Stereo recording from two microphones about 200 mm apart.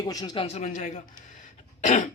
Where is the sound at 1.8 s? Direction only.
40° left (ahead or behind).